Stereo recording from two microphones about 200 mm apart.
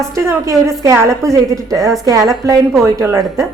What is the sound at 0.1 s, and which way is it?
A woman's voice, 15° right (ahead or behind).